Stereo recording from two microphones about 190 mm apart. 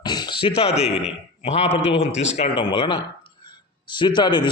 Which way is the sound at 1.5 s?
35° left (ahead or behind).